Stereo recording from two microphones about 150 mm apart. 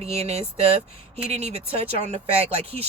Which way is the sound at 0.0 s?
45° right (ahead or behind).